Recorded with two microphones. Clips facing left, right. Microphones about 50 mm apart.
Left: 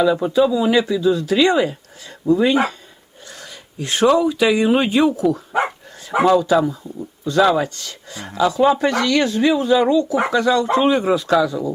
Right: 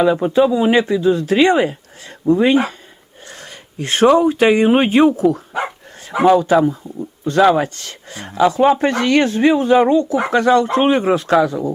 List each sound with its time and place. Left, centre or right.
0.0 s speech: right
3.2 s a sound: right
4.2 s speech: right
8.3 s speech: right